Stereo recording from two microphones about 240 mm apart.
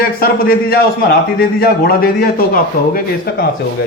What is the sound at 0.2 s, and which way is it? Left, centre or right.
A man's voice, left.